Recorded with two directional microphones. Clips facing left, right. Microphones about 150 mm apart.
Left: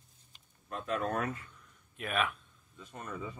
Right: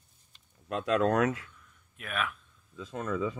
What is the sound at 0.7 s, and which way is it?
Speech, 90° right.